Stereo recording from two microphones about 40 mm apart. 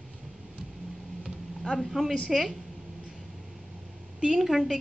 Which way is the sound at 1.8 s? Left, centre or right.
Centre.